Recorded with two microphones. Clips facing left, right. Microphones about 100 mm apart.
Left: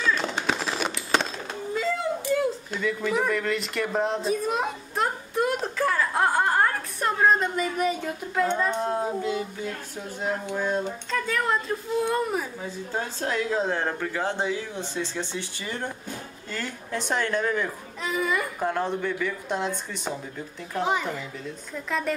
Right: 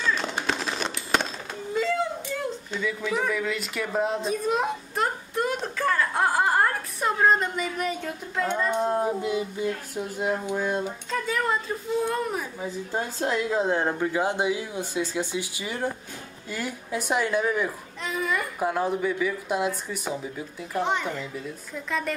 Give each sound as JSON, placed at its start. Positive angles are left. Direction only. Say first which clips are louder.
{"t": 0.0, "sound": "a sound", "louder": "left 1 dB", "side_deg": 0}
{"t": 8.6, "sound": "a woman's voice", "louder": "right 2 dB", "side_deg": -10}
{"t": 12.6, "sound": "a woman's voice", "louder": "right 1 dB", "side_deg": -10}